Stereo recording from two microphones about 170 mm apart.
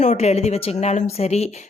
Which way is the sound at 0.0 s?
40° left (ahead or behind).